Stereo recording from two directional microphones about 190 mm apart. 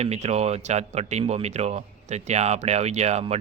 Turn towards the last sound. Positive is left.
turn(degrees=-35)  # may be behind; listen again after turning